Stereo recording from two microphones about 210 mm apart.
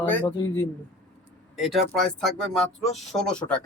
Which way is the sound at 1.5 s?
Centre (ahead or behind).